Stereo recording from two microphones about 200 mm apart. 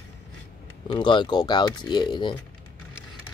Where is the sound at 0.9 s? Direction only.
25° left (ahead or behind).